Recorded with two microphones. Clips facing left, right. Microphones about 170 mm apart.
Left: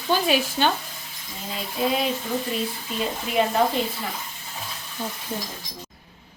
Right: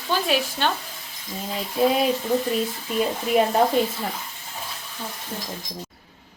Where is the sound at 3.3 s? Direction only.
45° right (ahead or behind).